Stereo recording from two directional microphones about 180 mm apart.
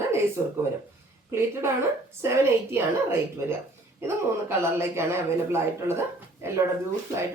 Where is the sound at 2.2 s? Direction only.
15° right (ahead or behind).